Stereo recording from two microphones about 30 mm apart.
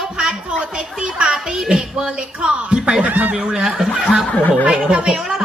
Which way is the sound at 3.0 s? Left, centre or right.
Right.